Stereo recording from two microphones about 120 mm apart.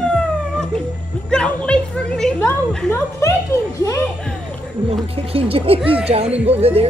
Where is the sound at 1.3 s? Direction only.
10° left (ahead or behind).